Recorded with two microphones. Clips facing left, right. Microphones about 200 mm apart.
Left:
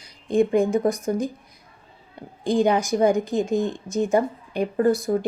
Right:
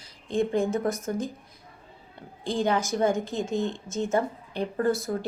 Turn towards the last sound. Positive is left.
turn(degrees=15)  # may be behind; listen again after turning